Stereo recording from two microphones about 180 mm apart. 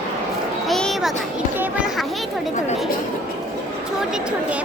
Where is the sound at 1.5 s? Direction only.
10° right (ahead or behind).